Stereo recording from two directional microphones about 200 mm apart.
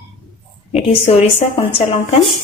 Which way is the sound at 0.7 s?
30° left (ahead or behind).